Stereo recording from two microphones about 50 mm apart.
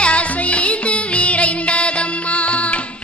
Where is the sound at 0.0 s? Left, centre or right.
Left.